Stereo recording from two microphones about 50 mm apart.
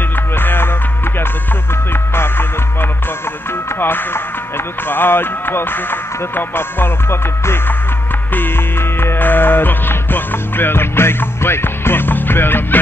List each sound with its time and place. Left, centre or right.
0.4 s music: left
2.1 s music: left
3.8 s speech: left
8.4 s music: left